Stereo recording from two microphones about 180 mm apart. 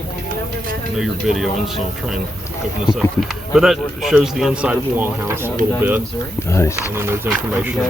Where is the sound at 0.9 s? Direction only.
Centre (ahead or behind).